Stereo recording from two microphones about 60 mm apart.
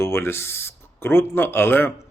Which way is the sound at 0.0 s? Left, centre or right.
Left.